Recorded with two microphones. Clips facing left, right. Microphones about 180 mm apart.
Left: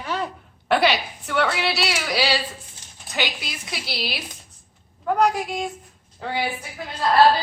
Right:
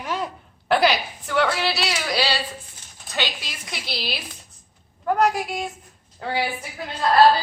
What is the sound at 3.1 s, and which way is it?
Speech, 20° left (ahead or behind).